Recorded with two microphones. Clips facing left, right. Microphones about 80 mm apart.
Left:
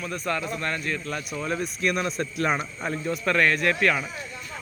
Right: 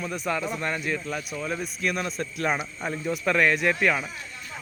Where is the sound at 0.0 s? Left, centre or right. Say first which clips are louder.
Even; centre.